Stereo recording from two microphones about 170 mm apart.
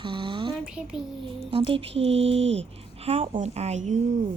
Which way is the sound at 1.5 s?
35° right (ahead or behind).